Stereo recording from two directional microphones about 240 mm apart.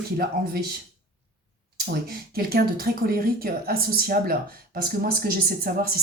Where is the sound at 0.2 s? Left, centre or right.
Right.